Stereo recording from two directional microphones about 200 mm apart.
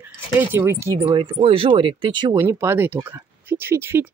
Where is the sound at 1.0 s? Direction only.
25° right (ahead or behind).